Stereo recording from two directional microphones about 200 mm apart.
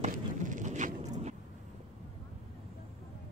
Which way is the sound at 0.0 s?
40° right (ahead or behind).